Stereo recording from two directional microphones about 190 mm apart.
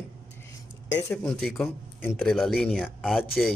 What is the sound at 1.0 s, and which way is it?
Speech, 5° left (ahead or behind).